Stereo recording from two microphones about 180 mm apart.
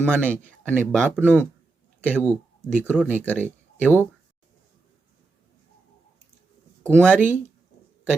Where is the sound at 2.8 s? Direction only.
5° right (ahead or behind).